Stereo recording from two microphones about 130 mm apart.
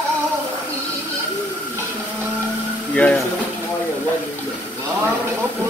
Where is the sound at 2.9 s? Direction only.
10° left (ahead or behind).